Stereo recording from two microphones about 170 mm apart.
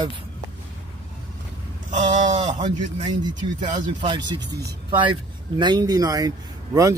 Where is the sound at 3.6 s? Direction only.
25° right (ahead or behind).